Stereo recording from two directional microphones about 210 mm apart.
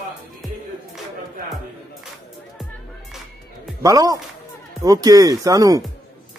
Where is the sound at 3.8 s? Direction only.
15° right (ahead or behind).